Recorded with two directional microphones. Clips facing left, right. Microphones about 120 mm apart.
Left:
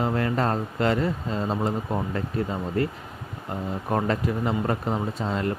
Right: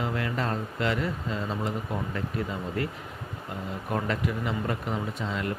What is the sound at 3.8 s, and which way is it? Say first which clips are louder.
Speech: left 4 dB; 35° left (ahead or behind).